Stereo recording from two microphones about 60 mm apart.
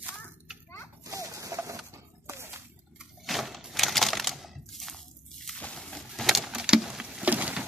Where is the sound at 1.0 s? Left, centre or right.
Right.